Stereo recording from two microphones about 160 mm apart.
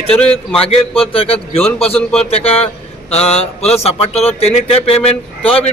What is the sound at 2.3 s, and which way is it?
A man's voice, 40° left (ahead or behind).